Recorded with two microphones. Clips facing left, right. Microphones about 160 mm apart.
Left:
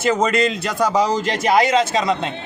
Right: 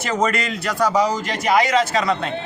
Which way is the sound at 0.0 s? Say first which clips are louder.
Left 4 dB; 25° left (ahead or behind).